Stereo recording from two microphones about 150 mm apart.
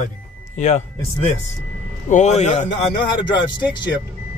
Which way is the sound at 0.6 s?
50° left (ahead or behind).